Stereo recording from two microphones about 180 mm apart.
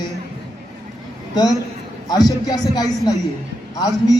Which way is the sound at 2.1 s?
20° left (ahead or behind).